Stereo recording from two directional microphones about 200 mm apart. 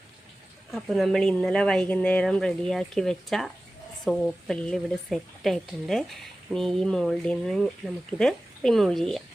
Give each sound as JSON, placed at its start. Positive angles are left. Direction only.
{"t": 0.7, "sound": "a woman's voice", "side_deg": 0}